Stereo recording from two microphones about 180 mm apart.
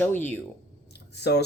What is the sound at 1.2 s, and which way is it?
Speech, 65° left (ahead or behind).